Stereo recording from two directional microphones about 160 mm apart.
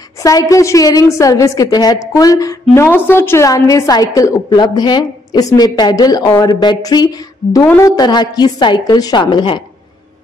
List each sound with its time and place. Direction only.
0.2 s a woman's voice: 20° left (ahead or behind)